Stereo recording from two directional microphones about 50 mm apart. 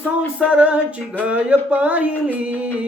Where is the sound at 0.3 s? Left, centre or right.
Right.